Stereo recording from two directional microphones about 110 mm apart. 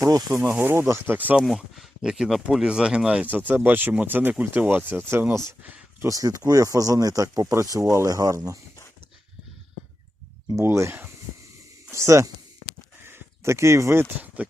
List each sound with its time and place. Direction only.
0.0 s speech: 35° right (ahead or behind)
0.6 s speech: 25° right (ahead or behind)
1.5 s speech: centre (ahead or behind); by 5.4 s 25° right (ahead or behind)
5.6 s a sound: 15° right (ahead or behind)
6.1 s speech: 30° right (ahead or behind)
10.5 s speech: 25° right (ahead or behind)